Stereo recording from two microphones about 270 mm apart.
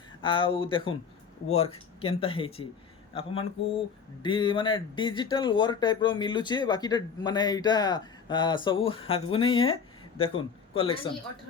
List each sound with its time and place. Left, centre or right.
0.2 s a man's voice: centre